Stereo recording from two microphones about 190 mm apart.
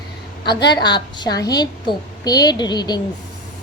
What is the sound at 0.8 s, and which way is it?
A woman's voice, 20° left (ahead or behind).